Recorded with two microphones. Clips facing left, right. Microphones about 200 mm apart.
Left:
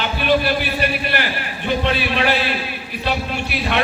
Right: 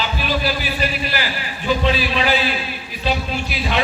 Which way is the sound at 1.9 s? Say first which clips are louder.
Left 1 dB; 60° left (ahead or behind).